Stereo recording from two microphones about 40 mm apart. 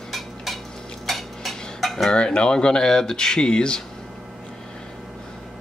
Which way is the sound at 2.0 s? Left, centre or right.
Left.